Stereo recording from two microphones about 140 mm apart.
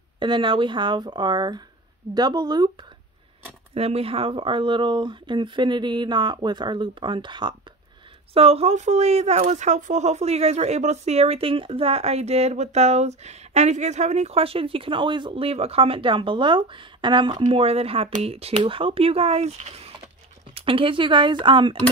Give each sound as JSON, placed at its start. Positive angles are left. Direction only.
{"t": 0.2, "sound": "speech", "side_deg": -35}
{"t": 3.7, "sound": "speech", "side_deg": -45}
{"t": 8.3, "sound": "speech", "side_deg": -45}